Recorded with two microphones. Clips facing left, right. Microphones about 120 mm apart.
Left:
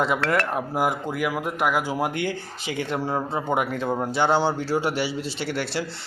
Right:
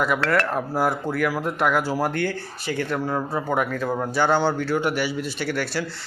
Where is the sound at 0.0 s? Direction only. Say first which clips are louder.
Right 1 dB; 20° left (ahead or behind).